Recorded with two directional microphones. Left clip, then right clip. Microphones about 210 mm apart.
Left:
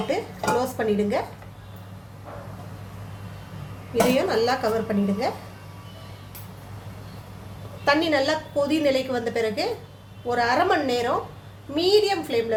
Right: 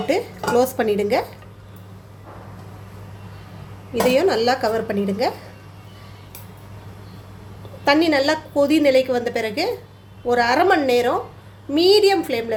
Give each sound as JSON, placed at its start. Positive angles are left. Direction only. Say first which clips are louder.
{"t": 0.1, "sound": "speech", "louder": "right 5 dB", "side_deg": -45}
{"t": 4.1, "sound": "speech", "louder": "right 4 dB", "side_deg": -40}
{"t": 7.9, "sound": "a woman's voice", "louder": "right 4 dB", "side_deg": -40}